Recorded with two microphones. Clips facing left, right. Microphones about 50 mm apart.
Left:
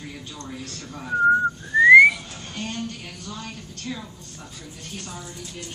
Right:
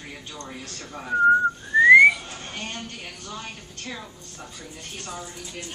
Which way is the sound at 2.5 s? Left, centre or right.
Right.